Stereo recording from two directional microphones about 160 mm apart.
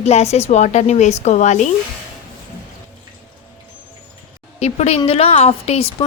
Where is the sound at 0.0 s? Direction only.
40° left (ahead or behind).